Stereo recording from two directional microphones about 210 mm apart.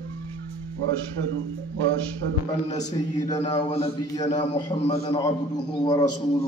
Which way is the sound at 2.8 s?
20° left (ahead or behind).